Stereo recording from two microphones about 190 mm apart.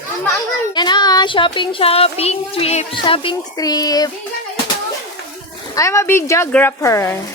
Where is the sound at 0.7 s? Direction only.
25° left (ahead or behind).